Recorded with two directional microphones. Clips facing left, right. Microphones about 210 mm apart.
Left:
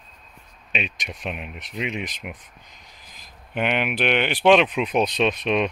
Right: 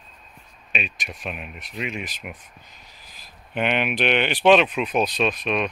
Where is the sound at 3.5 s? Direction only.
10° left (ahead or behind).